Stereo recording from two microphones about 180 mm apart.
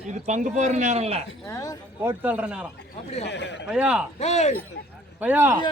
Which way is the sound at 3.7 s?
5° right (ahead or behind).